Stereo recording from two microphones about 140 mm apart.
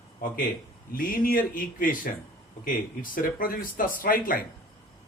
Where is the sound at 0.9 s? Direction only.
90° left.